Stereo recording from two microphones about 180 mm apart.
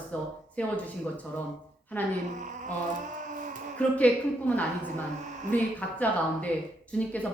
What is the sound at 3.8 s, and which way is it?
Speech, 5° left (ahead or behind).